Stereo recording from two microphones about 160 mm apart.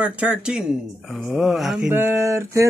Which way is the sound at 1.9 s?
15° right (ahead or behind).